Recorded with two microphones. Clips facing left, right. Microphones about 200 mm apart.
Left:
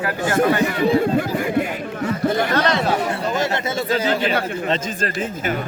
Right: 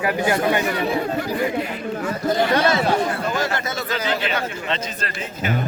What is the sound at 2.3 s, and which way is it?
Speech, 15° right (ahead or behind).